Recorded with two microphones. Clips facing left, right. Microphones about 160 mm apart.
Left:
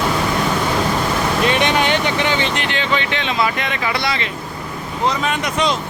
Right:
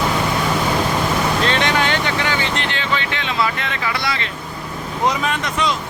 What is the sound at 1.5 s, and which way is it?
Speech, 15° left (ahead or behind).